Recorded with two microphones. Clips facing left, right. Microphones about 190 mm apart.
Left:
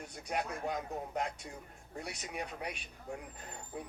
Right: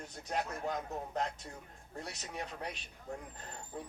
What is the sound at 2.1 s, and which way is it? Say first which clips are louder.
Speech: left 2 dB; 10° left (ahead or behind).